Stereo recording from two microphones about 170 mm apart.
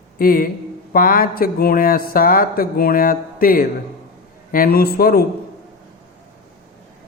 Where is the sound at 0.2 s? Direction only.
60° left (ahead or behind).